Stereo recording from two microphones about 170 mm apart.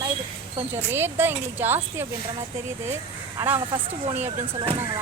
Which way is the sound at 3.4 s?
15° right (ahead or behind).